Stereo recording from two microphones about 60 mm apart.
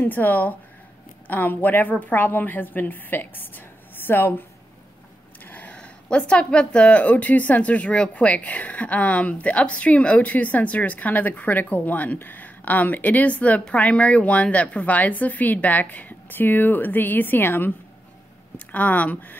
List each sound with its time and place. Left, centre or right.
0.0 s a woman's voice: left
5.4 s a sound: left
5.8 s a woman's voice: centre